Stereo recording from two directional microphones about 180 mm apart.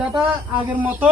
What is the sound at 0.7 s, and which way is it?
Speech, 10° right (ahead or behind).